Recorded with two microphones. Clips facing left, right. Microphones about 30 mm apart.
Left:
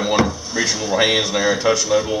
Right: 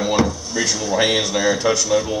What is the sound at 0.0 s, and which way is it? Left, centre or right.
Speech, centre.